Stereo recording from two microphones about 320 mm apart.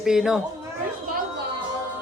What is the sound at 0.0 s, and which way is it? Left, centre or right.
Speech, centre.